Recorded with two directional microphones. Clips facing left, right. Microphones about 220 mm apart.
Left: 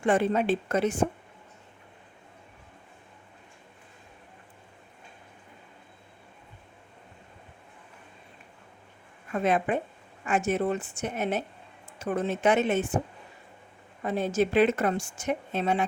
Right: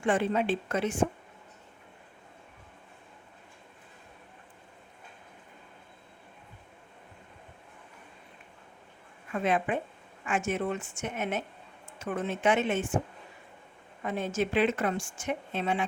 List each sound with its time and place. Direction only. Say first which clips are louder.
0.0 s a woman's voice: left 3 dB; 40° left (ahead or behind)
9.3 s a woman's voice: left 3 dB; 40° left (ahead or behind)
14.0 s a woman's voice: left 4 dB; 35° left (ahead or behind)